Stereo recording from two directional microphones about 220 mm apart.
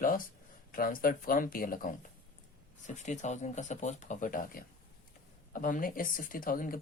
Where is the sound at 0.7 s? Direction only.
40° left (ahead or behind).